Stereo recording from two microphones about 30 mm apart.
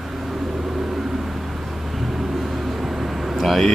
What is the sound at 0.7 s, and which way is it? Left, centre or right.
Vehicle, centre.